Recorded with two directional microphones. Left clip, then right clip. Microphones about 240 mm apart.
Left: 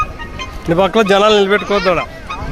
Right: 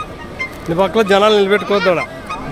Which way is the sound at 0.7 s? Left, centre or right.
Left.